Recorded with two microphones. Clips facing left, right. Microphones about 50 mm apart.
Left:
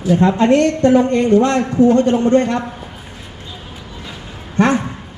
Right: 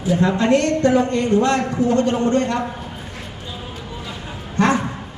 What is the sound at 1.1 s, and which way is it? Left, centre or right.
A man's voice, left.